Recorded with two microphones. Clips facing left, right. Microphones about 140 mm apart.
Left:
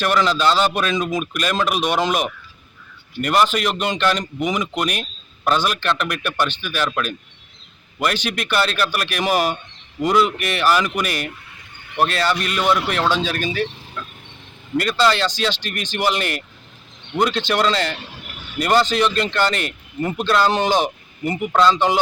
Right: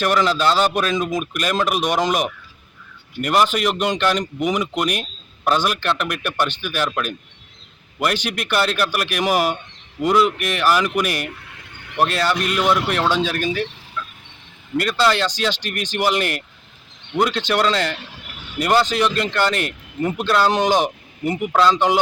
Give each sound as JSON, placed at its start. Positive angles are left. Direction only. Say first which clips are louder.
{"t": 0.0, "sound": "speech", "louder": "even", "side_deg": -10}
{"t": 14.0, "sound": "dog", "louder": "right 2 dB", "side_deg": 40}
{"t": 14.8, "sound": "speech", "louder": "even", "side_deg": -5}